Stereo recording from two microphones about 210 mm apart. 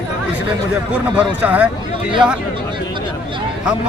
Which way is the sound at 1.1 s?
5° right (ahead or behind).